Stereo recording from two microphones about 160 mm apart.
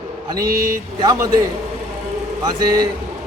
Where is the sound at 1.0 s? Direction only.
25° right (ahead or behind).